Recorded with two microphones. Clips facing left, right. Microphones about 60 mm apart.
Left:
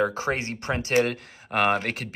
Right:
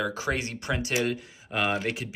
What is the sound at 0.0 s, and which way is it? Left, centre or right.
Speech, left.